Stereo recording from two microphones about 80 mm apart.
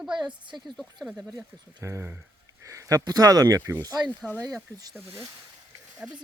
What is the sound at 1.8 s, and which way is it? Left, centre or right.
Speech, right.